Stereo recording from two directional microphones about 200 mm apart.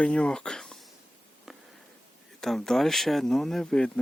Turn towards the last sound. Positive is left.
turn(degrees=5)  # may be behind; listen again after turning